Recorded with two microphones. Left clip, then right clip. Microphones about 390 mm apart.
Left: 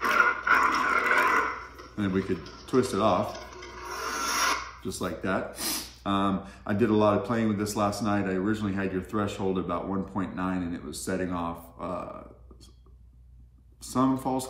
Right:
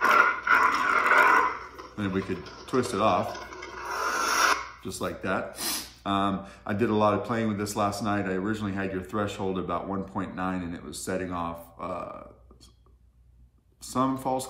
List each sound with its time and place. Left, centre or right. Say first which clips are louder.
0.0 s dog: right 3 dB; centre
0.3 s dog: right 1 dB; centre
2.0 s speech: left 2 dB; centre
3.3 s filing: right 2 dB; centre
4.8 s speech: right 1 dB; centre
13.8 s speech: even; centre